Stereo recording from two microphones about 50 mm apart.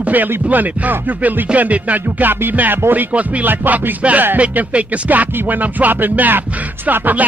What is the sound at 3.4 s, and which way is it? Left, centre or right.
Music, right.